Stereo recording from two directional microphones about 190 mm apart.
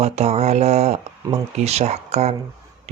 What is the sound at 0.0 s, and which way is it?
Speech, 35° right (ahead or behind).